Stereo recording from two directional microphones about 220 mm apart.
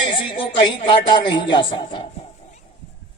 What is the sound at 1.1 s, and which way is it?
Speech, 20° left (ahead or behind).